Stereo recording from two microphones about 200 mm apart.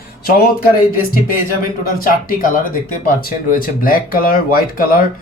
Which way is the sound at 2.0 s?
45° left (ahead or behind).